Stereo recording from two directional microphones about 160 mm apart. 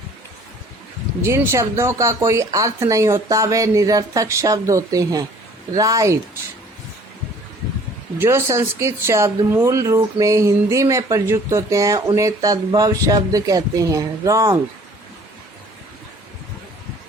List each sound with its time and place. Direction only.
1.2 s speech: 15° right (ahead or behind)
8.2 s speech: 15° right (ahead or behind)